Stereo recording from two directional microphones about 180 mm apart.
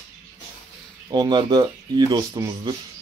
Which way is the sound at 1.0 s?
25° right (ahead or behind).